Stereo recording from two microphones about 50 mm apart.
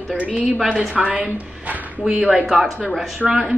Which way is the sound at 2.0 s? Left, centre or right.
Centre.